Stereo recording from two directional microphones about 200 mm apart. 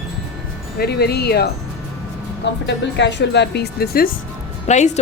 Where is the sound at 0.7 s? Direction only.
55° left (ahead or behind).